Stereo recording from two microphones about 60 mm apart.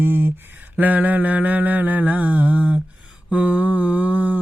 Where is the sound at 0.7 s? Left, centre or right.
Right.